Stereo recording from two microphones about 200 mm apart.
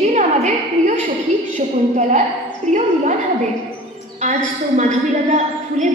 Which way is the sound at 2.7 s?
35° right (ahead or behind).